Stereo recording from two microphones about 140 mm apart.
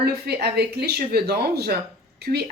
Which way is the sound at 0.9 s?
90° right.